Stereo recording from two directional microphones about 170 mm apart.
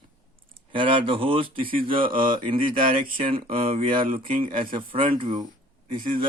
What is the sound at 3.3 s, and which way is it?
Speech, 35° right (ahead or behind).